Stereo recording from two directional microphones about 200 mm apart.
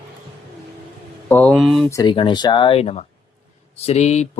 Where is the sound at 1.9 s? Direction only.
20° left (ahead or behind).